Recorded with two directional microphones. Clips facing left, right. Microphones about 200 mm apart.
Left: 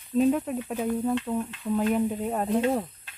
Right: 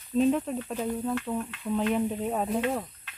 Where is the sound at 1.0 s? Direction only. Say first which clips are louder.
Left 3 dB; 15° left (ahead or behind).